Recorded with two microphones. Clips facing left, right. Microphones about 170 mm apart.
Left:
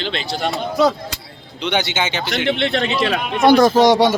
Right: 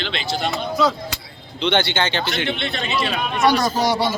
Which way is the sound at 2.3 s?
80° left.